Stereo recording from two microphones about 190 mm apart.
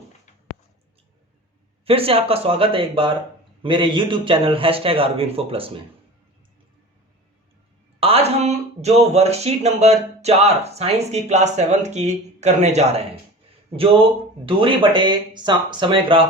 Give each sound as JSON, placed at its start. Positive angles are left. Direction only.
{"t": 1.8, "sound": "a man's voice", "side_deg": -30}
{"t": 7.9, "sound": "speech", "side_deg": -30}
{"t": 14.4, "sound": "a man's voice", "side_deg": -25}